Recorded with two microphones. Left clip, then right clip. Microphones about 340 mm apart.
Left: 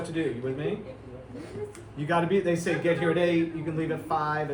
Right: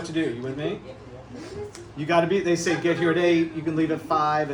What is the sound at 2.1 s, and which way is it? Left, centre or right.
Speech, centre.